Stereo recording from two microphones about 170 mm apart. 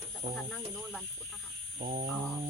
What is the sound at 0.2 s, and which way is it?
Speech, 90° right.